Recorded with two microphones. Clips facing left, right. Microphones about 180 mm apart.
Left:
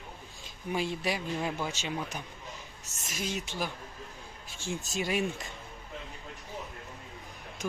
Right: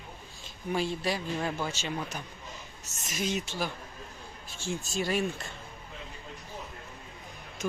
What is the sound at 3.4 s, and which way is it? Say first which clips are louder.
Speech: right 1 dB; 15° left (ahead or behind).